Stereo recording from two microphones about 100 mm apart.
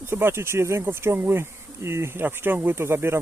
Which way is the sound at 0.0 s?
25° right (ahead or behind).